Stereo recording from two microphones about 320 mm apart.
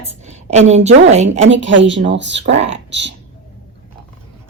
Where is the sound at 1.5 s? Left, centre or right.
Right.